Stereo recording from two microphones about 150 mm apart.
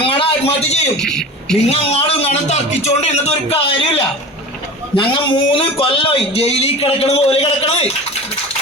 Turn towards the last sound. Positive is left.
turn(degrees=45)  # may be behind; listen again after turning